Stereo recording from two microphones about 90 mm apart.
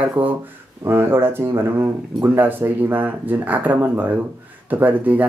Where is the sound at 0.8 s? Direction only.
25° right (ahead or behind).